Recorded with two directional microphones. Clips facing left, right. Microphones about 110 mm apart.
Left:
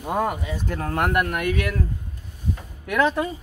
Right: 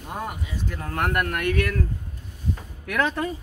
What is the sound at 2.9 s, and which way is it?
Speech, 15° left (ahead or behind).